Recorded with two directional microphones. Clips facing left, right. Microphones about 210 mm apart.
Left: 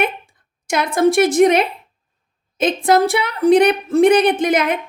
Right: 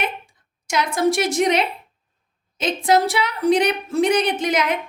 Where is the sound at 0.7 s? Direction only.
55° left (ahead or behind).